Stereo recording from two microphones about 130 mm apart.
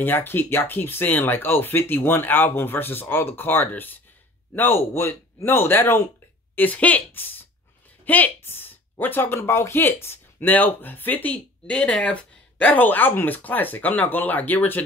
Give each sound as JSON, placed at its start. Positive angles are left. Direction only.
{"t": 0.0, "sound": "speech", "side_deg": 15}